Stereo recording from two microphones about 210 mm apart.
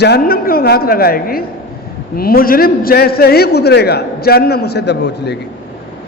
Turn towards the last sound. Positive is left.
turn(degrees=55)  # may be behind; listen again after turning